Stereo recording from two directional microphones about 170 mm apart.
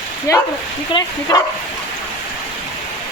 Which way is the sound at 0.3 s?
20° left (ahead or behind).